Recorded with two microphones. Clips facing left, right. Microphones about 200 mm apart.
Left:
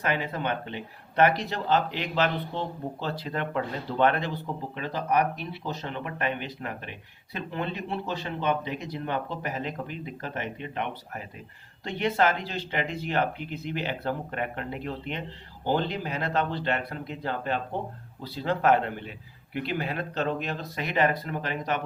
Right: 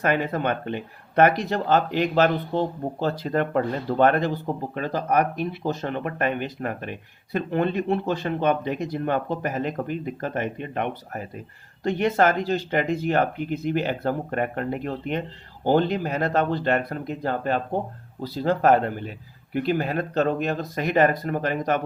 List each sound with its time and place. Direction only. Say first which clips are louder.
0.0 s speech: right 6 dB; 50° right (ahead or behind)